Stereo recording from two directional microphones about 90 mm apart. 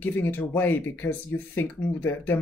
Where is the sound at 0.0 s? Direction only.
20° left (ahead or behind).